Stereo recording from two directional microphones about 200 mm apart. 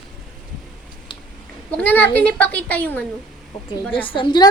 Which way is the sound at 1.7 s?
5° left (ahead or behind).